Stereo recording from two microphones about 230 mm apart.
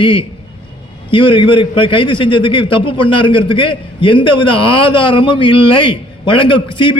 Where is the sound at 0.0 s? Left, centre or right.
Left.